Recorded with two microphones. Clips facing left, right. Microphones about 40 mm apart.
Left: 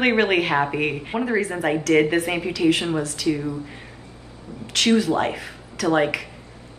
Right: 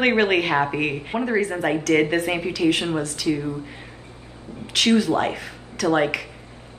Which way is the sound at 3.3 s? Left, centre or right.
Right.